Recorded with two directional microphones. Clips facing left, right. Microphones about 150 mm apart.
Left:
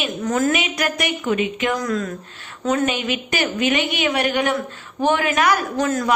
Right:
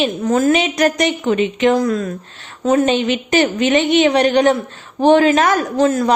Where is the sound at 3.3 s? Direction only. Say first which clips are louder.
Right 6 dB; 40° right (ahead or behind).